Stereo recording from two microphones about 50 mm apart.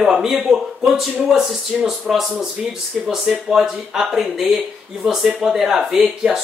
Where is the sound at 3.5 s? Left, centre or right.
Centre.